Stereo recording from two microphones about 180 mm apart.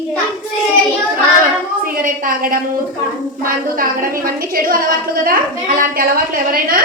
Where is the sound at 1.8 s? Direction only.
50° right (ahead or behind).